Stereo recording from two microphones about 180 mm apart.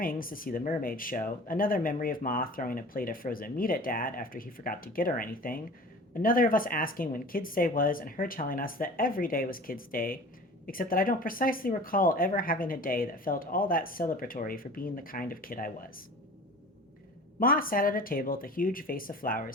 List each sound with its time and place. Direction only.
0.0 s speech: 50° left (ahead or behind)
17.4 s speech: 50° left (ahead or behind)